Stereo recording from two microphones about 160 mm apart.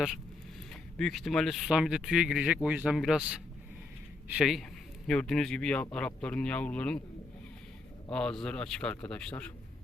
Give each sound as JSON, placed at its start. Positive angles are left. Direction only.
{"t": 0.7, "sound": "speech", "side_deg": 5}
{"t": 8.1, "sound": "speech", "side_deg": 5}